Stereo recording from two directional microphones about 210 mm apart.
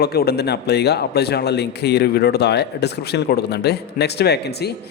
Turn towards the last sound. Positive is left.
turn(degrees=50)  # may be behind; listen again after turning